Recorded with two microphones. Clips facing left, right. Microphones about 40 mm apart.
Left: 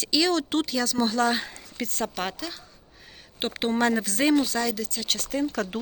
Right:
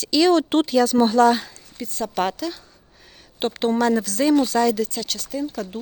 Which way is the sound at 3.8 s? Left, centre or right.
Left.